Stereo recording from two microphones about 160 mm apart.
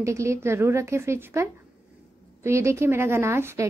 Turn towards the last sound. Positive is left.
turn(degrees=-15)  # may be behind; listen again after turning